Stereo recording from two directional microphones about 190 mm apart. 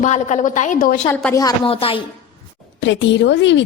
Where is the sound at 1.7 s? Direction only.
30° left (ahead or behind).